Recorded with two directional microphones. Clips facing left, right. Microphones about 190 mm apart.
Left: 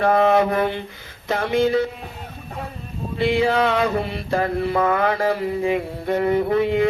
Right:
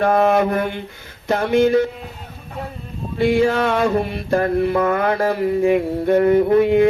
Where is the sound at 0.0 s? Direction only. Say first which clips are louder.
Right 1 dB; 50° right (ahead or behind).